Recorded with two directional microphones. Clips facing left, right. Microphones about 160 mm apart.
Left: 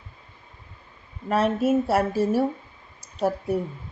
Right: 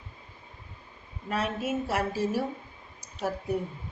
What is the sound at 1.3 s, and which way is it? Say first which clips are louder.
Speech: left 9 dB; 45° left (ahead or behind).